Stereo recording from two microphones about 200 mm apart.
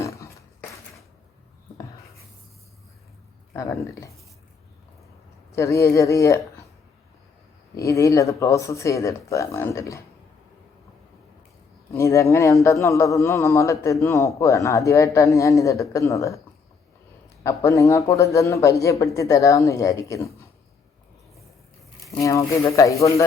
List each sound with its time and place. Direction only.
0.0 s a sound: 15° left (ahead or behind)
3.5 s a man's voice: 15° left (ahead or behind)
5.5 s a man's voice: 15° left (ahead or behind)
7.8 s a man's voice: 15° left (ahead or behind)
11.9 s a man's voice: 15° left (ahead or behind)
22.0 s a man's voice: 15° left (ahead or behind)